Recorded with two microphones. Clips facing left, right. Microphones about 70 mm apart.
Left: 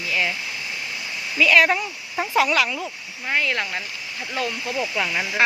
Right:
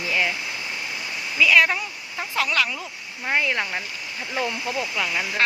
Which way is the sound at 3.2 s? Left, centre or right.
Centre.